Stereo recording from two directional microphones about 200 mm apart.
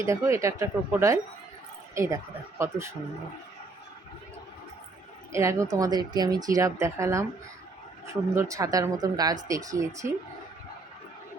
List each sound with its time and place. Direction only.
0.0 s speech: 15° right (ahead or behind)
5.3 s speech: 15° right (ahead or behind)